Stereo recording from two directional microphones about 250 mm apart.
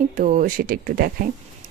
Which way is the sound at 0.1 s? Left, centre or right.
Right.